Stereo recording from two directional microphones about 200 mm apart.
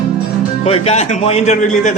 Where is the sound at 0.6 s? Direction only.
30° left (ahead or behind).